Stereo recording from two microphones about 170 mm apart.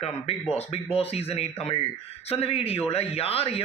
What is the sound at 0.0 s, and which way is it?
A man's voice, 35° left (ahead or behind).